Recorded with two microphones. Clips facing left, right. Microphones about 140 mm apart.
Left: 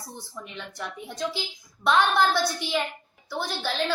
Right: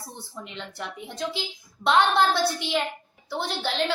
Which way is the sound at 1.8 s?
20° right (ahead or behind).